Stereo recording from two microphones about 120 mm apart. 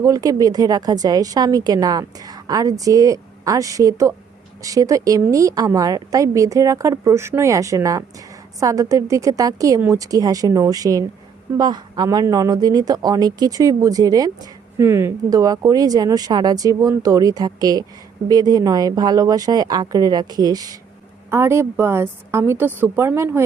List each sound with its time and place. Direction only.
0.0 s a woman's voice: 30° right (ahead or behind)
14.8 s a woman's voice: 20° right (ahead or behind)
21.2 s a woman's voice: 20° right (ahead or behind)